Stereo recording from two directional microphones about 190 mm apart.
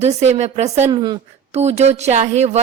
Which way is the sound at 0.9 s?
25° right (ahead or behind).